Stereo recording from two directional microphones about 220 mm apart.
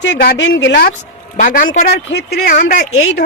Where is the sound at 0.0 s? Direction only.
50° left (ahead or behind).